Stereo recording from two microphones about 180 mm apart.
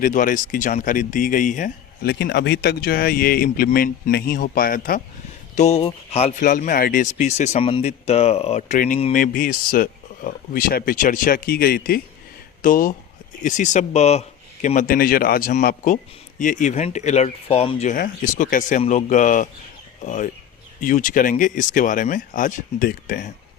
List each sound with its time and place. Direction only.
0.0 s speech: 45° left (ahead or behind)
5.5 s speech: 35° left (ahead or behind)
9.1 s speech: 50° left (ahead or behind)
17.9 s speech: 50° left (ahead or behind)